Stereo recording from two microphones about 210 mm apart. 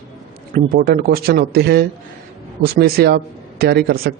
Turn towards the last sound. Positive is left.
turn(degrees=-50)  # may be behind; listen again after turning